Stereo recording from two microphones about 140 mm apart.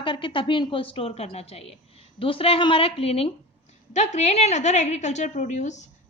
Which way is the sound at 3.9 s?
55° left (ahead or behind).